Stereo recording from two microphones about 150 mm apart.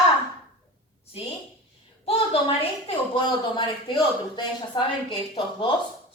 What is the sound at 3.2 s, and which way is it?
A man's voice, 30° left (ahead or behind).